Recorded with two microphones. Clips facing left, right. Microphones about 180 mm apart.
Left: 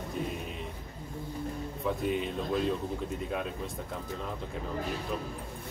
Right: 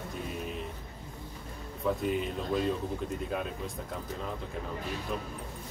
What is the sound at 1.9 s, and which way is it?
Speech, centre (ahead or behind).